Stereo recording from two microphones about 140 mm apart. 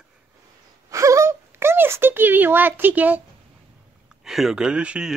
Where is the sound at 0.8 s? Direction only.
20° right (ahead or behind).